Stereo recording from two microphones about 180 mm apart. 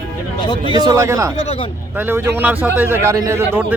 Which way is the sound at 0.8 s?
20° right (ahead or behind).